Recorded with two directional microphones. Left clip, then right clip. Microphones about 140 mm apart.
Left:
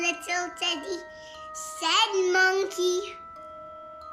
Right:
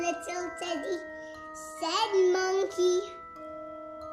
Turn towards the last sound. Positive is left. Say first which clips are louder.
# even
turn(degrees=-35)  # may be behind; listen again after turning